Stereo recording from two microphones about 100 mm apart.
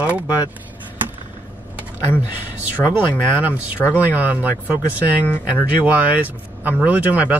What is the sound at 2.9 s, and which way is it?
Speech, 15° right (ahead or behind).